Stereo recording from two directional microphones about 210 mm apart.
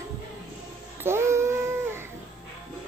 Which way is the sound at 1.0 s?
10° right (ahead or behind).